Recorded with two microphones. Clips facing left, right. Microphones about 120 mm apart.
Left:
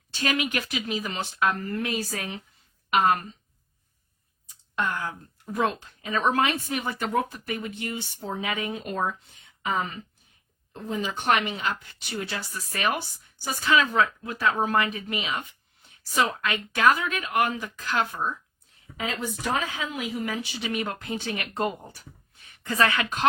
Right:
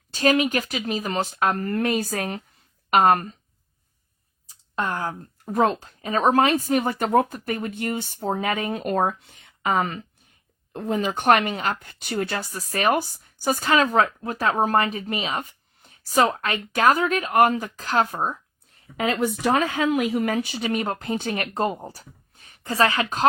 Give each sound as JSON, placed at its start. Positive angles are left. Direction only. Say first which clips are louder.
{"t": 0.1, "sound": "speech", "louder": "right 7 dB", "side_deg": -40}
{"t": 4.4, "sound": "speech", "louder": "right 2 dB", "side_deg": -30}
{"t": 18.9, "sound": "speech", "louder": "right 8 dB", "side_deg": -65}